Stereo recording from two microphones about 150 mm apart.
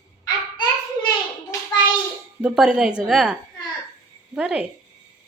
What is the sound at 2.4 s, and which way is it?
A woman's voice, 5° right (ahead or behind).